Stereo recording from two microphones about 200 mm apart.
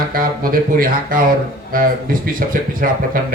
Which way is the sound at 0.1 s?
45° right (ahead or behind).